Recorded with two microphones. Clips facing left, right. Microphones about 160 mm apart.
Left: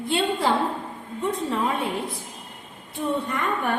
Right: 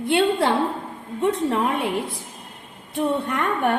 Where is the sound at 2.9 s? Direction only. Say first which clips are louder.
Right 3 dB; 65° right (ahead or behind).